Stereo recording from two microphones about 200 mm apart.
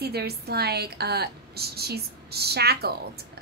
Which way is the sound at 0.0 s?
50° right (ahead or behind).